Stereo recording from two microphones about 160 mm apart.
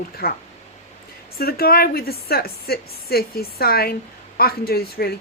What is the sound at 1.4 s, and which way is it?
Speech, 70° left (ahead or behind).